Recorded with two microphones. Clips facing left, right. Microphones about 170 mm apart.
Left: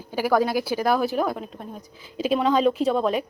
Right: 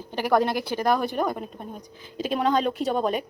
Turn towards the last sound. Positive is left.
turn(degrees=0)  # may be behind; listen again after turning